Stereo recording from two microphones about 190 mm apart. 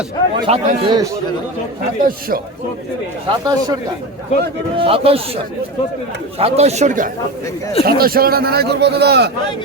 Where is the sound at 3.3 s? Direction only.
20° right (ahead or behind).